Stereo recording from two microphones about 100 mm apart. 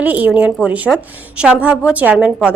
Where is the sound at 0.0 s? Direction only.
15° right (ahead or behind).